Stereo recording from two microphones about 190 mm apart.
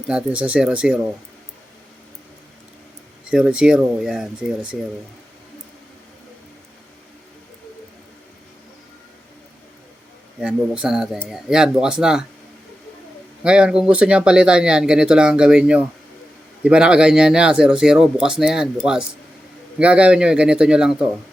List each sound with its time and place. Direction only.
0.1 s speech: 5° right (ahead or behind)
3.2 s speech: 5° right (ahead or behind)
10.4 s speech: 5° right (ahead or behind)
13.4 s speech: 5° right (ahead or behind)